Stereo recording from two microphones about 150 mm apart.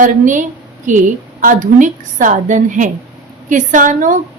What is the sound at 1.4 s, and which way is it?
A woman's voice, 60° right (ahead or behind).